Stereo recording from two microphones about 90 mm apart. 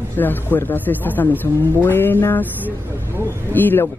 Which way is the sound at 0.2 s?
20° left (ahead or behind).